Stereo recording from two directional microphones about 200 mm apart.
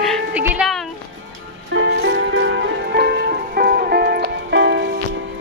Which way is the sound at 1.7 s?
65° right (ahead or behind).